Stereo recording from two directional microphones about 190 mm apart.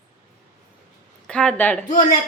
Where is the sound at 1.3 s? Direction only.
5° left (ahead or behind).